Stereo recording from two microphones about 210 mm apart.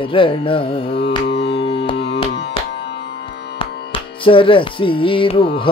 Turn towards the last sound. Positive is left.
turn(degrees=25)  # may be behind; listen again after turning